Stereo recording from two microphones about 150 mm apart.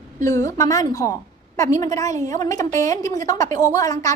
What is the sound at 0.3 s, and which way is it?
A woman's voice, 20° left (ahead or behind).